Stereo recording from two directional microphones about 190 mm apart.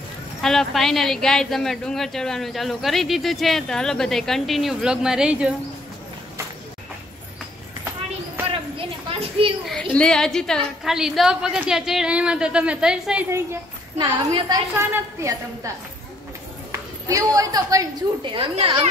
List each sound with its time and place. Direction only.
0.4 s a woman's voice: centre (ahead or behind)
9.4 s a child's voice: 30° right (ahead or behind)
9.9 s a woman's voice: 5° left (ahead or behind); by 15.7 s 15° right (ahead or behind)
17.1 s a woman's voice: 15° right (ahead or behind)